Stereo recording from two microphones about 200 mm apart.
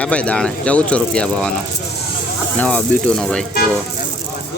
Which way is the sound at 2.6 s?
5° left (ahead or behind).